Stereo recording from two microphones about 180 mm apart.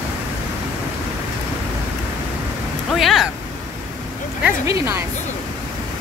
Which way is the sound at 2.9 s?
Centre (ahead or behind).